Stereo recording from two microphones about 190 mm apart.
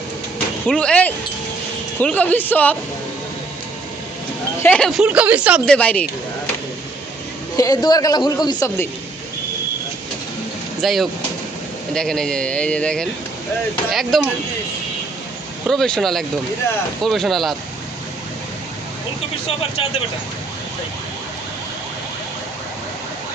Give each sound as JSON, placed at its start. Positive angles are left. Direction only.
{"t": 0.7, "sound": "speech", "side_deg": 5}
{"t": 4.6, "sound": "speech", "side_deg": 5}
{"t": 5.6, "sound": "speech", "side_deg": 5}
{"t": 7.5, "sound": "a woman's voice", "side_deg": 20}
{"t": 10.8, "sound": "speech", "side_deg": 0}
{"t": 15.6, "sound": "speech", "side_deg": 0}